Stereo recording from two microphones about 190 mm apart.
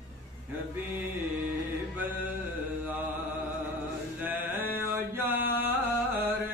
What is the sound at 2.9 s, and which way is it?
Mantra, 10° right (ahead or behind).